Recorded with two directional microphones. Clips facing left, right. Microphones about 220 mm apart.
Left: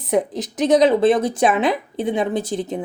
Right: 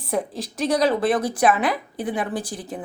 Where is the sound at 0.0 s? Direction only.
20° left (ahead or behind).